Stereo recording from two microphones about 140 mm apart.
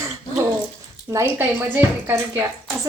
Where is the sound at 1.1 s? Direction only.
15° right (ahead or behind).